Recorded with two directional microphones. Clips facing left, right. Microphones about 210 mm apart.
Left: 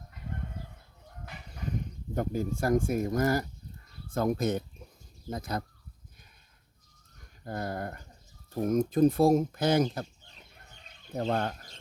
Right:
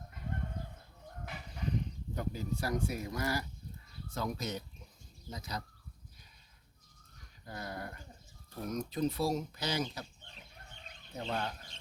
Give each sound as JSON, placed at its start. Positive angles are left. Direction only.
{"t": 2.1, "sound": "speech", "side_deg": 50}
{"t": 7.4, "sound": "speech", "side_deg": 50}
{"t": 11.1, "sound": "speech", "side_deg": 50}